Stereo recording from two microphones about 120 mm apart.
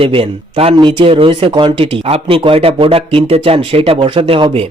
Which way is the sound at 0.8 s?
40° right (ahead or behind).